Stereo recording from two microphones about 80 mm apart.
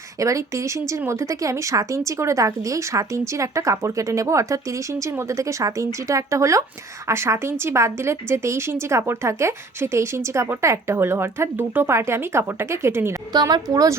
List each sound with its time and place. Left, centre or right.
0.2 s speech: right
13.3 s a woman's voice: right